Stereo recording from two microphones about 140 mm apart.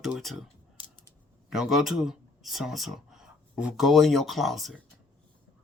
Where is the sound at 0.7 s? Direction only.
35° left (ahead or behind).